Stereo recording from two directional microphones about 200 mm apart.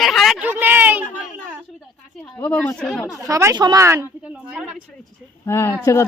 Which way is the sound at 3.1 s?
15° right (ahead or behind).